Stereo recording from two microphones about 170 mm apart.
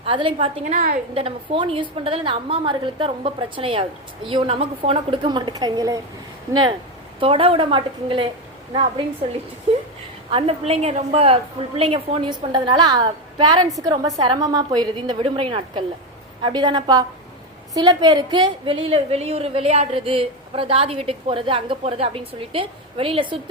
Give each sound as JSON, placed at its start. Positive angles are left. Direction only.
{"t": 0.0, "sound": "a woman's voice", "side_deg": -30}
{"t": 9.7, "sound": "whimper", "side_deg": -40}
{"t": 10.2, "sound": "a woman's voice", "side_deg": -35}